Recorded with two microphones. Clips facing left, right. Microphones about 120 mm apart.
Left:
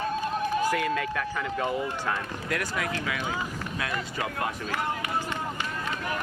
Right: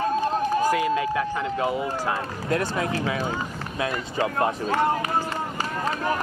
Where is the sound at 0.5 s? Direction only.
40° right (ahead or behind).